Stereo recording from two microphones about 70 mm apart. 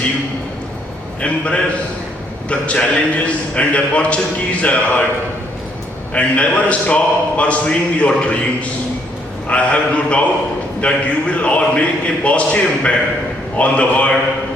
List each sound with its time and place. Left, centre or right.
2.5 s a man's voice: centre
6.1 s a man's voice: centre
9.5 s a man's voice: centre